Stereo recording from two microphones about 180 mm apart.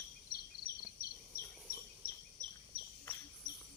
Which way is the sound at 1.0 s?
55° left (ahead or behind).